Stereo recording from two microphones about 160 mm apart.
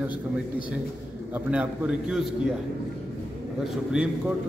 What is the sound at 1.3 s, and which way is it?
Speech, 10° right (ahead or behind).